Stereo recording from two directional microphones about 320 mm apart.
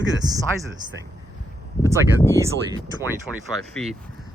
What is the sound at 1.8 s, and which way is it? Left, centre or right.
Speech, centre.